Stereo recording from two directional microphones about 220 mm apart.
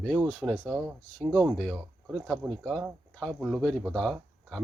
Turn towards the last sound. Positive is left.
turn(degrees=0)  # may be behind; listen again after turning